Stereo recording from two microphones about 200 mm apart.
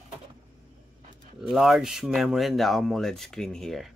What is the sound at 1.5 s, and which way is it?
Speech, centre (ahead or behind).